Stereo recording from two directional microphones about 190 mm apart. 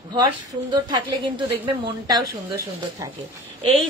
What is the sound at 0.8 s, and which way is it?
Speech, 25° right (ahead or behind).